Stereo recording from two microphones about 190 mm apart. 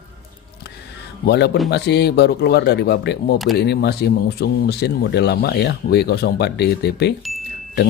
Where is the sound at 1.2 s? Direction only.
55° left (ahead or behind).